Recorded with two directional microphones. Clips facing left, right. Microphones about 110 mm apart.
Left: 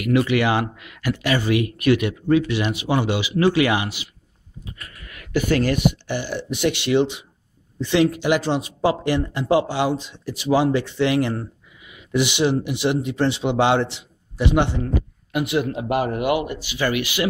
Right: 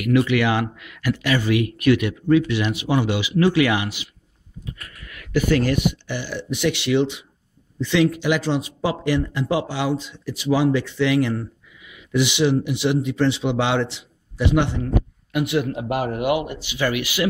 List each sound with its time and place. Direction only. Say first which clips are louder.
0.0 s speech: even; 35° left (ahead or behind)
5.0 s speech: right 1 dB; 35° left (ahead or behind)
15.3 s speech: even; 30° left (ahead or behind)
15.7 s a man's voice: left 2 dB; centre (ahead or behind); by 16.7 s 20° right (ahead or behind)
16.8 s speech: even; 5° right (ahead or behind)